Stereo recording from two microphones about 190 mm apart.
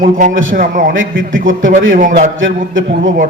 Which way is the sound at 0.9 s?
90° right.